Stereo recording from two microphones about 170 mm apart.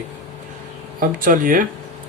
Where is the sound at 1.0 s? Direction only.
55° right (ahead or behind).